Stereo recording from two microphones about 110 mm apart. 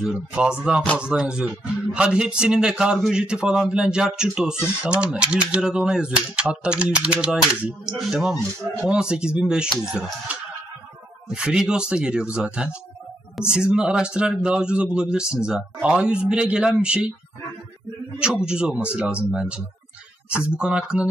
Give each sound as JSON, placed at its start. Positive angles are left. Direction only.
{"t": 0.0, "sound": "speech", "side_deg": -5}
{"t": 11.2, "sound": "speech", "side_deg": -5}
{"t": 18.2, "sound": "speech", "side_deg": -10}